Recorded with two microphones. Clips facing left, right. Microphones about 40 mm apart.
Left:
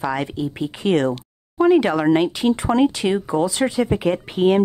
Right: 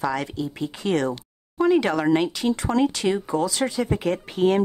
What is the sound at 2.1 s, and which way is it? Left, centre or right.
Speech, left.